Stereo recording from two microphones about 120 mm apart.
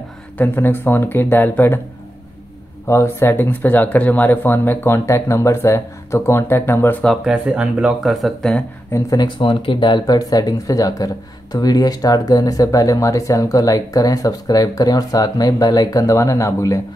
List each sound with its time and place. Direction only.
0.4 s speech: 15° left (ahead or behind)
2.9 s speech: 20° left (ahead or behind)
7.2 s speech: 10° right (ahead or behind)
8.1 s speech: centre (ahead or behind)
8.9 s speech: 30° left (ahead or behind)
9.4 s speech: 45° left (ahead or behind); by 16.8 s 25° left (ahead or behind)